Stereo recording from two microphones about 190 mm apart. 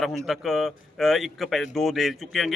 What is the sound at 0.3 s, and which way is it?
Speech, centre (ahead or behind).